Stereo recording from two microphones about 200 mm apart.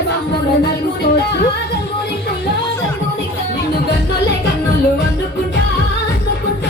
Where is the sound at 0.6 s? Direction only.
55° left (ahead or behind).